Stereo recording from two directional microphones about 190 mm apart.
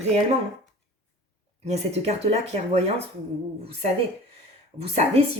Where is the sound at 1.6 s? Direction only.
35° right (ahead or behind).